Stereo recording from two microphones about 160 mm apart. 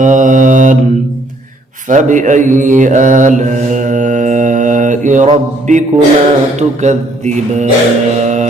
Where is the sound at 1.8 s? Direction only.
50° right (ahead or behind).